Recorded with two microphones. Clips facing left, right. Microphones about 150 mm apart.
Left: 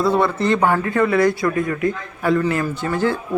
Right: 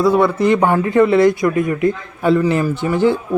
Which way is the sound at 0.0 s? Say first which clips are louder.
Right 4 dB; 10° right (ahead or behind).